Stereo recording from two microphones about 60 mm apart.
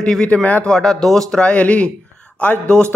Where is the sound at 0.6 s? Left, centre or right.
Centre.